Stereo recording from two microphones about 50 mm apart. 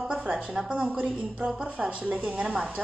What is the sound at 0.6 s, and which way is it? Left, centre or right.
A woman's voice, right.